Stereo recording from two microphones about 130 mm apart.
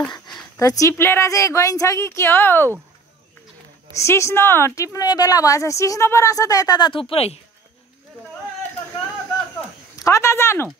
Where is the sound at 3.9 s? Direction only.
20° left (ahead or behind); by 7.4 s 50° left (ahead or behind).